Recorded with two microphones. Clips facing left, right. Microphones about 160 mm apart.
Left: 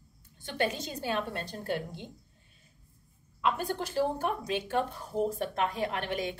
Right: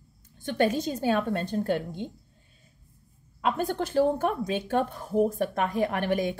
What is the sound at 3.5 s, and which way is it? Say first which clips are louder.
A woman's voice: right 6 dB; 55° right (ahead or behind).